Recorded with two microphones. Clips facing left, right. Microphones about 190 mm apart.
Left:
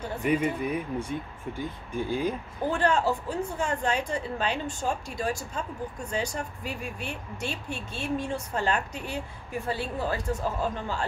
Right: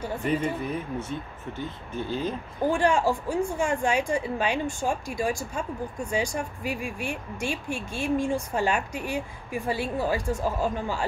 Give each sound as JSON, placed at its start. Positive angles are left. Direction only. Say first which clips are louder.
{"t": 0.2, "sound": "speech", "louder": "left 2 dB", "side_deg": 10}
{"t": 2.7, "sound": "a woman's voice", "louder": "right 2 dB", "side_deg": -10}